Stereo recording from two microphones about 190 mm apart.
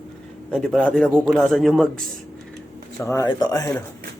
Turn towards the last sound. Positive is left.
turn(degrees=20)  # may be behind; listen again after turning